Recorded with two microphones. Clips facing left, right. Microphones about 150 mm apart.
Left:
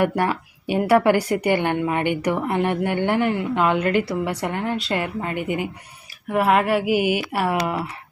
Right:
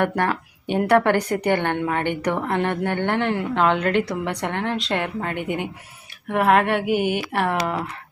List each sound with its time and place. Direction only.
0.0 s a woman's voice: 5° left (ahead or behind)